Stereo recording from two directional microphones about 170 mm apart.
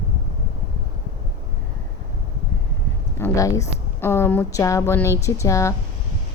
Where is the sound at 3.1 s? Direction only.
15° left (ahead or behind).